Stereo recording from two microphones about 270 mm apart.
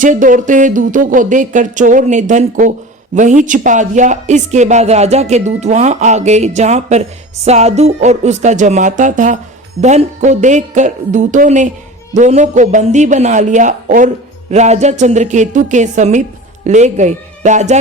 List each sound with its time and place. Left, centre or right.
0.0 s speech: right